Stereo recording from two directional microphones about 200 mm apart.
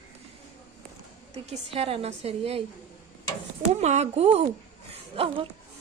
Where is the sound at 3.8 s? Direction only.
35° right (ahead or behind).